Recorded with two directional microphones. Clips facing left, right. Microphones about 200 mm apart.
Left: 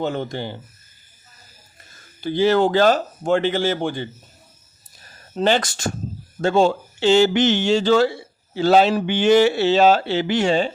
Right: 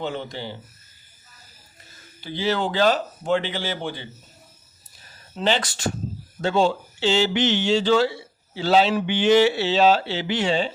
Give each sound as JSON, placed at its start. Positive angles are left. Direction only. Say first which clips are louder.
{"t": 0.0, "sound": "speech", "louder": "left 5 dB", "side_deg": 45}
{"t": 2.2, "sound": "speech", "louder": "left 8 dB", "side_deg": 50}
{"t": 5.3, "sound": "speech", "louder": "left 4 dB", "side_deg": 45}